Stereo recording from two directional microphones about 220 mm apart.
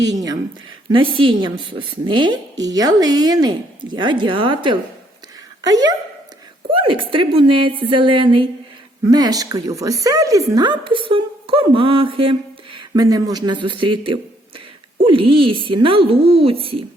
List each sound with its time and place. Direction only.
1.1 s a woman's voice: 25° right (ahead or behind)